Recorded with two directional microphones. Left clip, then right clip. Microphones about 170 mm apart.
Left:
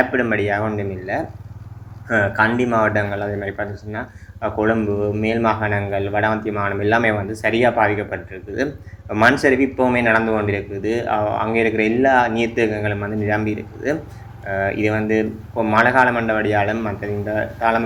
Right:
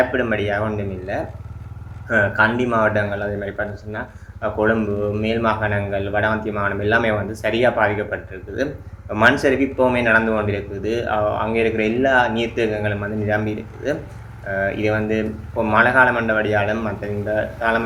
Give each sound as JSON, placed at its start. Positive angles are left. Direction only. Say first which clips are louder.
{"t": 0.0, "sound": "a man's voice", "louder": "left 1 dB", "side_deg": 15}